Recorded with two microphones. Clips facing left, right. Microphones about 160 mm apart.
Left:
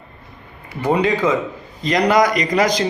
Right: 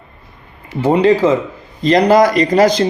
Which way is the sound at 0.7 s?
25° right (ahead or behind).